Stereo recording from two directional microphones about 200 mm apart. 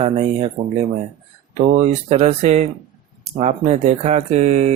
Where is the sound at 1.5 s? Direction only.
35° right (ahead or behind).